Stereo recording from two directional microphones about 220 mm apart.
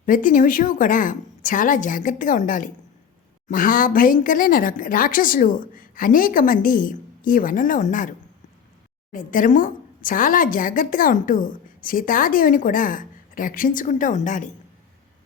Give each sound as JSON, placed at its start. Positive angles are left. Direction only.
{"t": 0.0, "sound": "a woman's voice", "side_deg": 40}
{"t": 9.1, "sound": "a woman's voice", "side_deg": 35}